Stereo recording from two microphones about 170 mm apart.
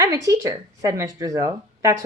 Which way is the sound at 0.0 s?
20° right (ahead or behind).